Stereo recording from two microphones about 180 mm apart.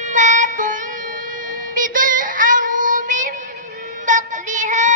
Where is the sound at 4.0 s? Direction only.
45° right (ahead or behind).